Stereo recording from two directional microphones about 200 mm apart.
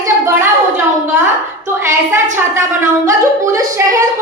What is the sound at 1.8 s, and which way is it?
Speech, 10° right (ahead or behind).